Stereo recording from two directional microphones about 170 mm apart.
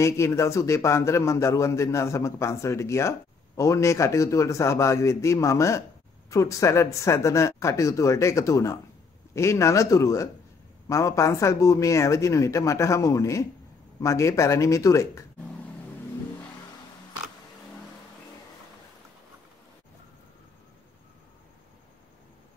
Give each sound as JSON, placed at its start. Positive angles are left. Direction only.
{"t": 0.0, "sound": "a man's voice", "side_deg": 15}